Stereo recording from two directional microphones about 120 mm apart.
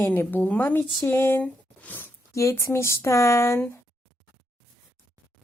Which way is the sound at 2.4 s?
25° left (ahead or behind).